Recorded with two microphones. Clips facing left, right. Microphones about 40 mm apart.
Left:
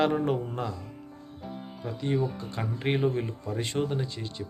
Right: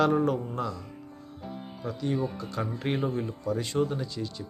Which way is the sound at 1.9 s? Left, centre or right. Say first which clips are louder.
Left 1 dB; left.